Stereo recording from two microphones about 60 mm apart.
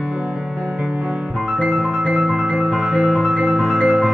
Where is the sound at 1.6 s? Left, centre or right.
Centre.